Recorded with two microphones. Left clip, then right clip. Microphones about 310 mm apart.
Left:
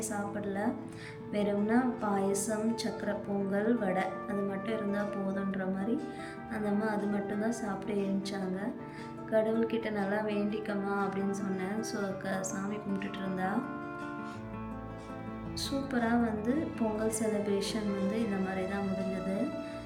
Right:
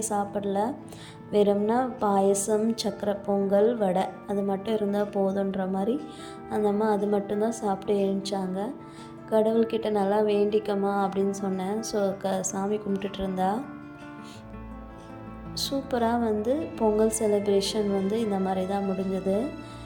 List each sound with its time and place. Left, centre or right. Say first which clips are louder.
0.0 s a woman's voice: right 8 dB; centre
15.5 s a woman's voice: right 7 dB; centre